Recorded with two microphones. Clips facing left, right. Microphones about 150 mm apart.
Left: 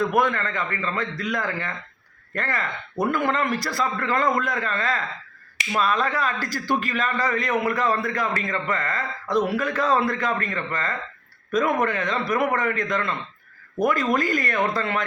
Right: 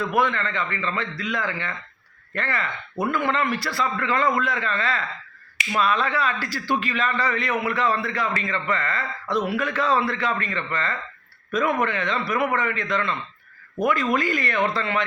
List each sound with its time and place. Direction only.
0.0 s a man's voice: 45° left (ahead or behind)